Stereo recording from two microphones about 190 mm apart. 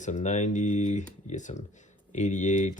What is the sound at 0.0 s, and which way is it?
Speech, 40° left (ahead or behind).